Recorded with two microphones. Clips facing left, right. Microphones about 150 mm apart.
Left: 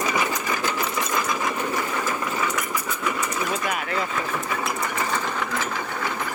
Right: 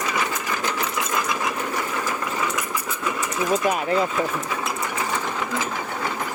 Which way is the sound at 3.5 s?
35° right (ahead or behind).